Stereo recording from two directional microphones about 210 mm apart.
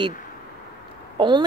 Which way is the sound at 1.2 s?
20° right (ahead or behind).